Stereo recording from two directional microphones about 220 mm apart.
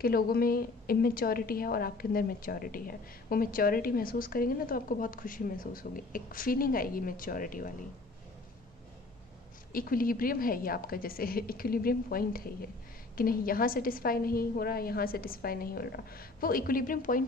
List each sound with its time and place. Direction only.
0.0 s a woman's voice: 45° left (ahead or behind)
9.7 s a woman's voice: 40° left (ahead or behind)